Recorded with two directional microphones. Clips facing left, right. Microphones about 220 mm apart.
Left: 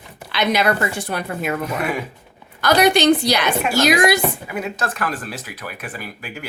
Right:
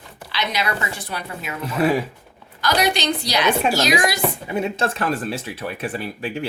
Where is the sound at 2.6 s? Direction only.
55° left (ahead or behind).